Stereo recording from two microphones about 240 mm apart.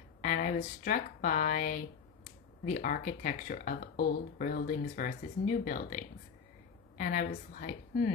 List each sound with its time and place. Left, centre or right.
0.2 s speech: left